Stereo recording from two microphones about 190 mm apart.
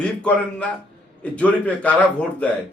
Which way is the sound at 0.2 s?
5° left (ahead or behind).